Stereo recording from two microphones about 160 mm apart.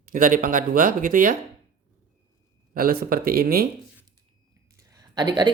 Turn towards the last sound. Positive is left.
turn(degrees=-25)  # may be behind; listen again after turning